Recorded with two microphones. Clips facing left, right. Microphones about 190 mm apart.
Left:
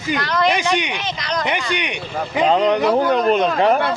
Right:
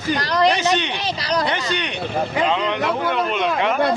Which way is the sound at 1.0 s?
35° right (ahead or behind).